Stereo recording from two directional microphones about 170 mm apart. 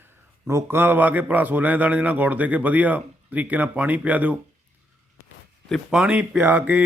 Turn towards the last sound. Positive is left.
turn(degrees=-10)  # may be behind; listen again after turning